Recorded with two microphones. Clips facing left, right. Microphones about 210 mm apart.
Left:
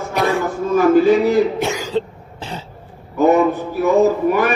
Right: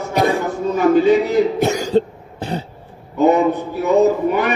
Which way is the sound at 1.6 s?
40° right (ahead or behind).